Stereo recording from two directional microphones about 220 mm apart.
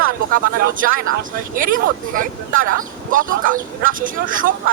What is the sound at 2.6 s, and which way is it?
Speech, 40° right (ahead or behind).